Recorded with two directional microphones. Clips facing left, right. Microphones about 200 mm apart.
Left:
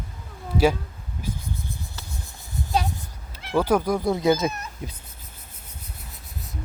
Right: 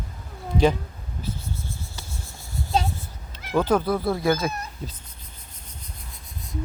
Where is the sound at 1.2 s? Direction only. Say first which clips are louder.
Left 1 dB; 15° left (ahead or behind).